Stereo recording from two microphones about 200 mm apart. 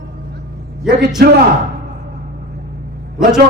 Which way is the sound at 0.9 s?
50° right (ahead or behind).